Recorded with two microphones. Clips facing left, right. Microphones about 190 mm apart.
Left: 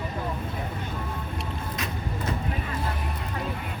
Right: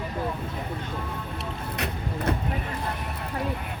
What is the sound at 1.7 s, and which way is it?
Music, 65° right (ahead or behind).